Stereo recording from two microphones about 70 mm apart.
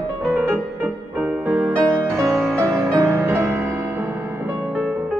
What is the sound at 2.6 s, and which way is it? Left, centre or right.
Music, right.